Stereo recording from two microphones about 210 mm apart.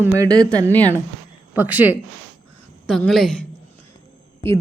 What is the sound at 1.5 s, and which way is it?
Speech, 10° right (ahead or behind).